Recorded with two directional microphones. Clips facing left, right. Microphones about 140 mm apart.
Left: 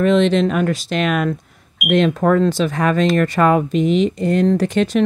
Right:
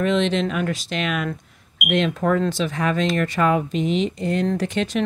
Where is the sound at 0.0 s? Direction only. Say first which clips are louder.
Left 6 dB; 45° left (ahead or behind).